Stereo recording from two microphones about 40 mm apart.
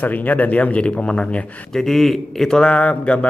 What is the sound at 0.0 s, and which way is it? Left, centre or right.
Speech, left.